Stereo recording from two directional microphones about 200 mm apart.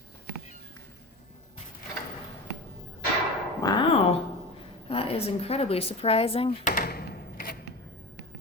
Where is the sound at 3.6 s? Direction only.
25° left (ahead or behind).